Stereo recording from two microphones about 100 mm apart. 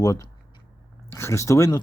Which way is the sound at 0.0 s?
35° left (ahead or behind).